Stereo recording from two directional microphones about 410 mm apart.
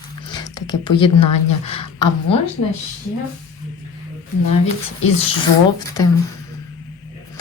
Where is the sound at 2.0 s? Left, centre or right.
Left.